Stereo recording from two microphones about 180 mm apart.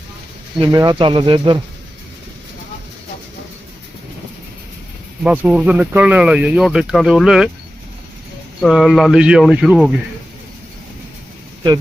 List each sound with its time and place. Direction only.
0.6 s speech: 20° right (ahead or behind)
5.2 s speech: 10° right (ahead or behind)
8.6 s speech: centre (ahead or behind)